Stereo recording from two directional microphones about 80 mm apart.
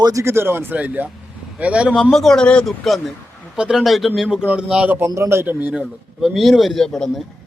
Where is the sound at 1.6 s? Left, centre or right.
Centre.